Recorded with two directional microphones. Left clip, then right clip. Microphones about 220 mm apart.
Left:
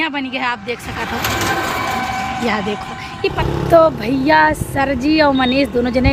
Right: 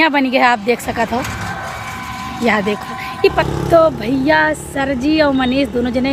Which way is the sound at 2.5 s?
10° right (ahead or behind).